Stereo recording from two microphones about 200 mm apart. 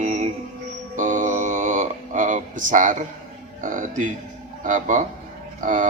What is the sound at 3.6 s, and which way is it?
A man's voice, 40° right (ahead or behind).